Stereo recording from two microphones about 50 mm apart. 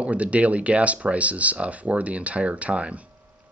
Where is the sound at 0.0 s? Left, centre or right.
Right.